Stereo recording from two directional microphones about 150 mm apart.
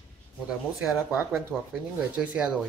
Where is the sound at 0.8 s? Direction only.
5° right (ahead or behind).